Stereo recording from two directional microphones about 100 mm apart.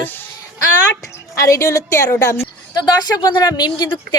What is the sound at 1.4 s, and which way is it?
A woman's voice, 30° left (ahead or behind).